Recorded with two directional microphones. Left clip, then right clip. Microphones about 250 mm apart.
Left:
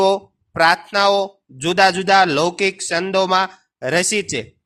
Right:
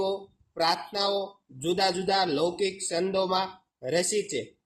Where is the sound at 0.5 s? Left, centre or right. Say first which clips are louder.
Left 12 dB; left.